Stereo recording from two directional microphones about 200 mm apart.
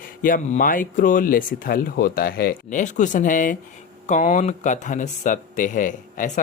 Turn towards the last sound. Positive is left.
turn(degrees=40)  # may be behind; listen again after turning